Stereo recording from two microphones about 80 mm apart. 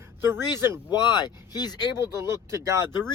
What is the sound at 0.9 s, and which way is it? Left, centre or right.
Speech, left.